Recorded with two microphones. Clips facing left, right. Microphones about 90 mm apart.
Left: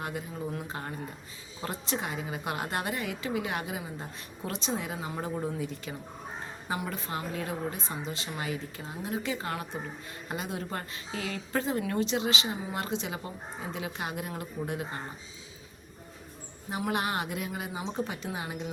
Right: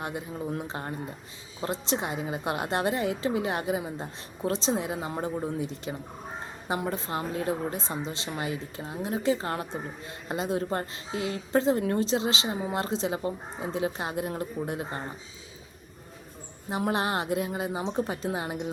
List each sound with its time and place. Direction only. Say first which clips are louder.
0.0 s a woman's voice: right 2 dB; 25° right (ahead or behind)
16.8 s a woman's voice: right 3 dB; 30° right (ahead or behind)